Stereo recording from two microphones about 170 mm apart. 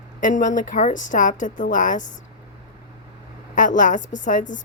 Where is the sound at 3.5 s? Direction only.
50° left (ahead or behind).